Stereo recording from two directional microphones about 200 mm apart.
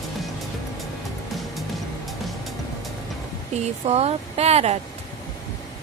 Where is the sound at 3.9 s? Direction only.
30° right (ahead or behind).